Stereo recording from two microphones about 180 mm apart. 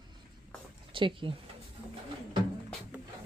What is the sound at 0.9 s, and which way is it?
Speech, 30° right (ahead or behind).